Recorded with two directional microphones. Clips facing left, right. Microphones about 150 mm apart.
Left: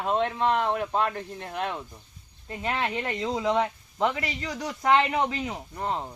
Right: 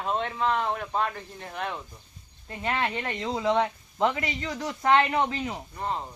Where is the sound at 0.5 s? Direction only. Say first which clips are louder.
Left 2 dB; 60° left (ahead or behind).